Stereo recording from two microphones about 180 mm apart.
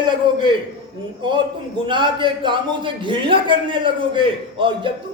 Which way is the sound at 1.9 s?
25° right (ahead or behind).